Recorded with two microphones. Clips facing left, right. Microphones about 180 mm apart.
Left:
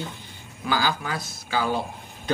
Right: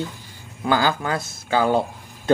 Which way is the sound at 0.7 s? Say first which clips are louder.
Right 5 dB; 55° right (ahead or behind).